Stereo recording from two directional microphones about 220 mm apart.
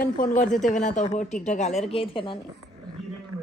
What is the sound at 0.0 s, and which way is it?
A woman's voice, 35° left (ahead or behind).